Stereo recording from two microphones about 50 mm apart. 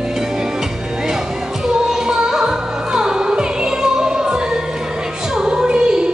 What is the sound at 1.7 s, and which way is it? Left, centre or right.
Music, centre.